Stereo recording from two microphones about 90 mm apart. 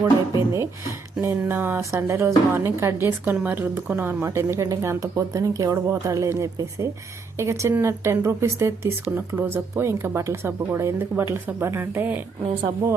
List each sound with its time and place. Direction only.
0.0 s speech: 35° right (ahead or behind)